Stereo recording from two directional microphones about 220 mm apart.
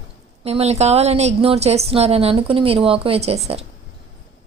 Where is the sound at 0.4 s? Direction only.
30° right (ahead or behind).